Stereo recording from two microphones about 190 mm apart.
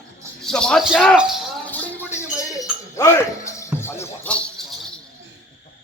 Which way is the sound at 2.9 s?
15° left (ahead or behind).